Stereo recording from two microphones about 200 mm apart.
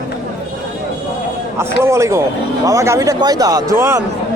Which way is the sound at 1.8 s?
15° right (ahead or behind).